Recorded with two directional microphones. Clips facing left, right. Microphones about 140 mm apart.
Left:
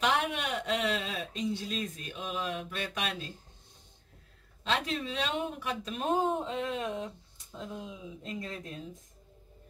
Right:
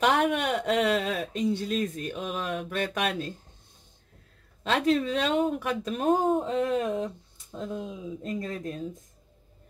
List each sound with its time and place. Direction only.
0.0 s a sound: 50° right (ahead or behind)
4.6 s speech: 50° right (ahead or behind)
8.2 s speech: 45° right (ahead or behind)